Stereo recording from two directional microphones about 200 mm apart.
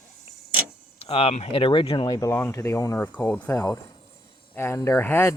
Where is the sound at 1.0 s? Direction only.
30° left (ahead or behind).